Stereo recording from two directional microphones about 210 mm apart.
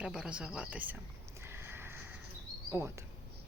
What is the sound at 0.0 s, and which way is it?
Speech, 5° right (ahead or behind).